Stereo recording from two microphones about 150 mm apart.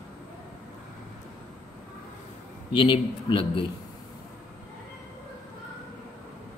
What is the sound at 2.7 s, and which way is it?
Speech, 35° left (ahead or behind).